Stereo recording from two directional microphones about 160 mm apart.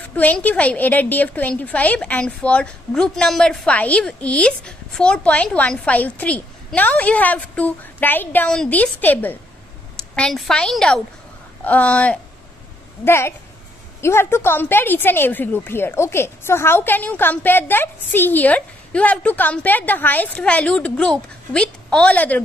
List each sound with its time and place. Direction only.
0.1 s a woman's voice: 10° left (ahead or behind)